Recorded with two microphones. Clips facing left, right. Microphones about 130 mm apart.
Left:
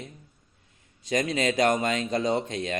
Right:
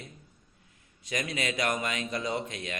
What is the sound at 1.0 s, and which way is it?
A man's voice, 30° left (ahead or behind).